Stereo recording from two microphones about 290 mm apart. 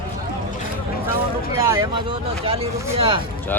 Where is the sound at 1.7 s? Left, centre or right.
Centre.